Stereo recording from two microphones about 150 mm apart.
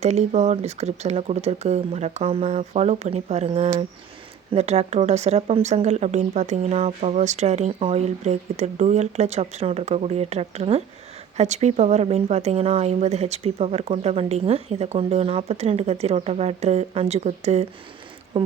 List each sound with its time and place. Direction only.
0.0 s speech: 50° right (ahead or behind)